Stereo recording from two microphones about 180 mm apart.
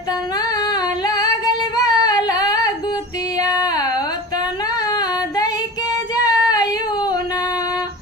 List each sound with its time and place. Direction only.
1.0 s female singing: 20° left (ahead or behind)
3.4 s a sound: 20° left (ahead or behind)
6.2 s female singing: 20° left (ahead or behind)